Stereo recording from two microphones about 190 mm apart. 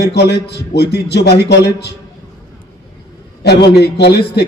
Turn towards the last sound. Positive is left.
turn(degrees=60)  # may be behind; listen again after turning